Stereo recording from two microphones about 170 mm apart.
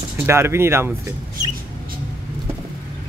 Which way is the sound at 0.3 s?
15° right (ahead or behind).